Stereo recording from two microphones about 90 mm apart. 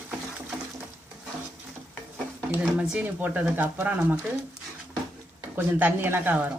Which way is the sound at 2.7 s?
15° right (ahead or behind).